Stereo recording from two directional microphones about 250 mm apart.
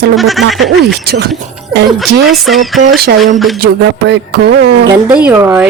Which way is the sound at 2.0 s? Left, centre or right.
Centre.